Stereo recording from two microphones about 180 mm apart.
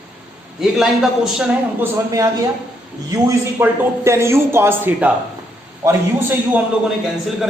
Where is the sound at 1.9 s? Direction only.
15° right (ahead or behind).